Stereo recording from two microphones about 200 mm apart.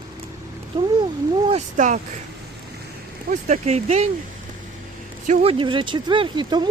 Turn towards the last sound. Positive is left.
turn(degrees=-20)  # may be behind; listen again after turning